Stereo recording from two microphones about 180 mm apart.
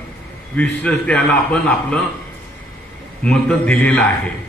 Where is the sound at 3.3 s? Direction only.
5° left (ahead or behind).